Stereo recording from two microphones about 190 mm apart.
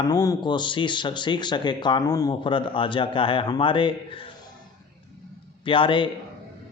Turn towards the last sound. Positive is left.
turn(degrees=25)  # may be behind; listen again after turning